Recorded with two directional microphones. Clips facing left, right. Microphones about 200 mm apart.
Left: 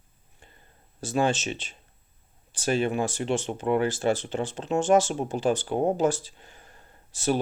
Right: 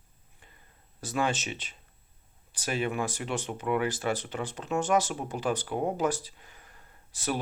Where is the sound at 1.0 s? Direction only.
30° left (ahead or behind).